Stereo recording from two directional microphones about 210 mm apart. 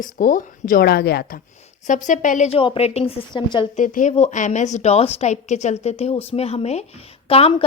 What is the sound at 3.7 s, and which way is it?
A woman's voice, 40° left (ahead or behind).